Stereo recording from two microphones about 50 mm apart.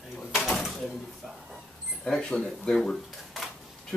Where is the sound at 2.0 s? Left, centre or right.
Centre.